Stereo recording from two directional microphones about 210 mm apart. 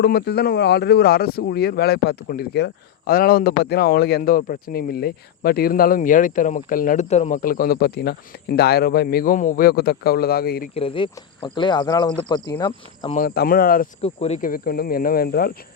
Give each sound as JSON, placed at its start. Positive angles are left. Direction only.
{"t": 0.0, "sound": "speech", "side_deg": 50}
{"t": 10.8, "sound": "speech", "side_deg": 25}
{"t": 13.1, "sound": "speech", "side_deg": 45}
{"t": 14.0, "sound": "speech", "side_deg": 30}